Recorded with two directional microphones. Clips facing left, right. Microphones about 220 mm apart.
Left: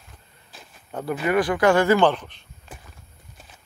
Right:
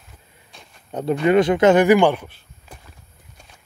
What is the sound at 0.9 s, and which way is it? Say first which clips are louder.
Speech: right 6 dB; 25° right (ahead or behind).